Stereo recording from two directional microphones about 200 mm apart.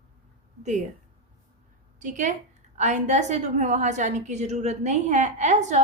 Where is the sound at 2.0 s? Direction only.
40° right (ahead or behind).